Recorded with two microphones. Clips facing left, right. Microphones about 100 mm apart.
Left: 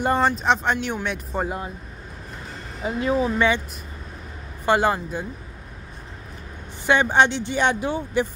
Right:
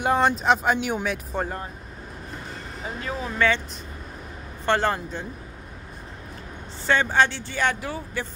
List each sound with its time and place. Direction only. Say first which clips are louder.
0.0 s speech: even; centre (ahead or behind)
3.0 s speech: left 5 dB; 20° left (ahead or behind)
4.6 s speech: left 3 dB; 10° left (ahead or behind)
6.9 s speech: left 3 dB; 20° left (ahead or behind)